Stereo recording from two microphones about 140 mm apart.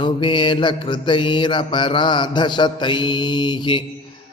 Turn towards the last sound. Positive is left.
turn(degrees=35)  # may be behind; listen again after turning